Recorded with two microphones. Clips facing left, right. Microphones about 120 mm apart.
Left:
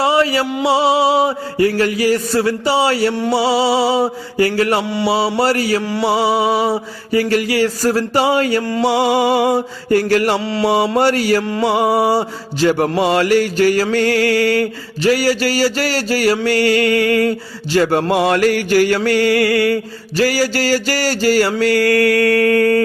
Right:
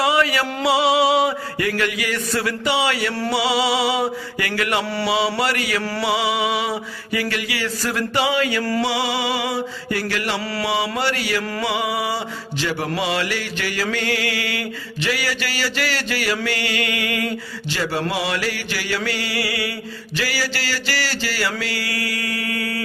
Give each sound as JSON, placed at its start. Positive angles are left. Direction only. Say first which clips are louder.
{"t": 0.0, "sound": "mantra", "louder": "left 4 dB", "side_deg": 30}
{"t": 0.6, "sound": "a sound", "louder": "left 3 dB", "side_deg": 30}
{"t": 4.8, "sound": "mantra", "louder": "left 4 dB", "side_deg": 20}
{"t": 5.0, "sound": "a sound", "louder": "left 6 dB", "side_deg": 35}
{"t": 5.8, "sound": "music", "louder": "left 5 dB", "side_deg": 20}
{"t": 6.1, "sound": "a sound", "louder": "left 6 dB", "side_deg": 40}
{"t": 8.6, "sound": "music", "louder": "left 4 dB", "side_deg": 20}
{"t": 8.9, "sound": "mantra", "louder": "left 8 dB", "side_deg": 50}
{"t": 10.4, "sound": "music", "louder": "left 7 dB", "side_deg": 25}
{"t": 10.9, "sound": "mantra", "louder": "left 9 dB", "side_deg": 45}